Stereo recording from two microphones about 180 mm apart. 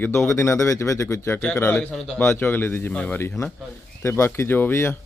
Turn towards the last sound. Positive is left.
turn(degrees=15)  # may be behind; listen again after turning